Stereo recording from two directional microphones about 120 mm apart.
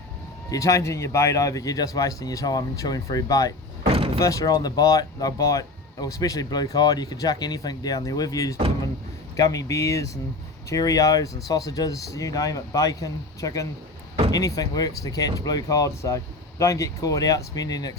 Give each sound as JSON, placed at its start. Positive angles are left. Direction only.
{"t": 0.5, "sound": "speech", "side_deg": 25}
{"t": 3.8, "sound": "door", "side_deg": -50}
{"t": 4.2, "sound": "speech", "side_deg": 30}